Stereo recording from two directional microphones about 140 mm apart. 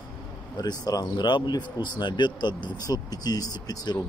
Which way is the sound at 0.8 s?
30° left (ahead or behind).